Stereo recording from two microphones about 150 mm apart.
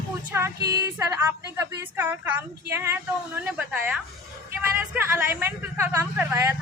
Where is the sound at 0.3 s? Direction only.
15° right (ahead or behind).